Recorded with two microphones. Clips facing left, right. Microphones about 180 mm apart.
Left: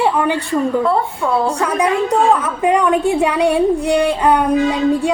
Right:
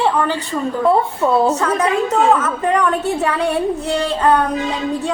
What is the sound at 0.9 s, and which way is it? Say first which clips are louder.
Speech: right 2 dB; 20° right (ahead or behind).